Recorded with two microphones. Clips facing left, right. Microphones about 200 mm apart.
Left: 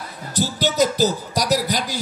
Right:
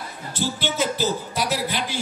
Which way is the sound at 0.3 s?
40° left (ahead or behind).